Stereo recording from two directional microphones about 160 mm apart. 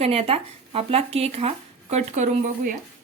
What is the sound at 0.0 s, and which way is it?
Speech, 40° right (ahead or behind).